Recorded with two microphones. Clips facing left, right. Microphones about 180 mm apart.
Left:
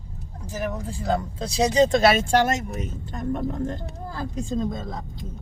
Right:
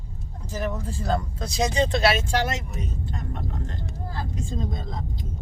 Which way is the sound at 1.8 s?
50° left (ahead or behind).